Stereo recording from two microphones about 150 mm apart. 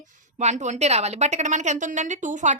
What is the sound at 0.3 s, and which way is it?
A woman's voice, 50° right (ahead or behind).